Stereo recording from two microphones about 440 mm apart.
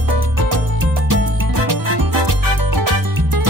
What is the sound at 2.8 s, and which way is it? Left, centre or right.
Music, right.